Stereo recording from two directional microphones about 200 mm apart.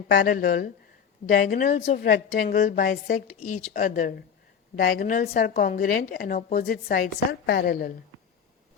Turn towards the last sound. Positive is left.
turn(degrees=50)  # may be behind; listen again after turning